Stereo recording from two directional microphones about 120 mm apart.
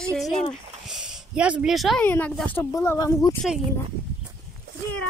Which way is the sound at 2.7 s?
30° left (ahead or behind).